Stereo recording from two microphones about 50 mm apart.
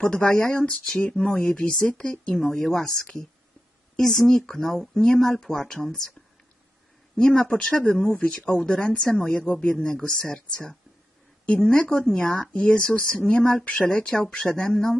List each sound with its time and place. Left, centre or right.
0.2 s speech: left; by 1.3 s centre
1.3 s speech: left
2.2 s speech: centre
7.2 s speech: centre
8.1 s speech: left
9.8 s speech: centre
11.8 s speech: left